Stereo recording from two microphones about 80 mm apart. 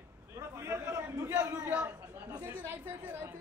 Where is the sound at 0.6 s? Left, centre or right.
Right.